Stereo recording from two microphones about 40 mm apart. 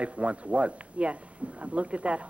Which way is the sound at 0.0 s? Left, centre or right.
Right.